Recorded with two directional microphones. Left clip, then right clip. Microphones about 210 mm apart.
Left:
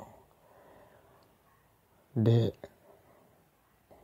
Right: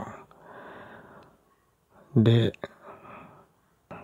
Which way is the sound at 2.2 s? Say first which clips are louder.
Right 5 dB; 15° right (ahead or behind).